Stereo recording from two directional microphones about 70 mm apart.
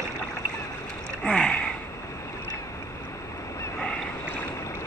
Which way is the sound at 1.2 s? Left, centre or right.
Centre.